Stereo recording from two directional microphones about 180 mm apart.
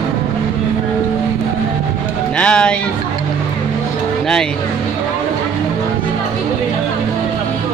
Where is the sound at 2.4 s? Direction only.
5° left (ahead or behind).